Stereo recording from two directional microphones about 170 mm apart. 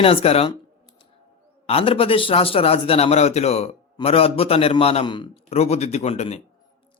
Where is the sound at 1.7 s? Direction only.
35° left (ahead or behind).